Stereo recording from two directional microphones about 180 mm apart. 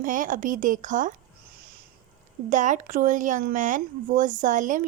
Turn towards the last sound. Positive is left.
turn(degrees=-45)  # may be behind; listen again after turning